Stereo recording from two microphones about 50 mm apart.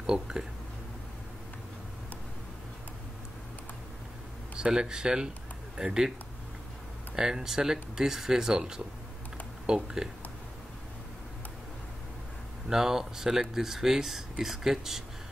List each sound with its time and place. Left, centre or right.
0.0 s speech: centre
4.6 s speech: centre
7.2 s speech: centre
12.6 s speech: centre